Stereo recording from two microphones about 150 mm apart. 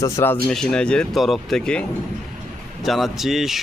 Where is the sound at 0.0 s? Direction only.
15° left (ahead or behind).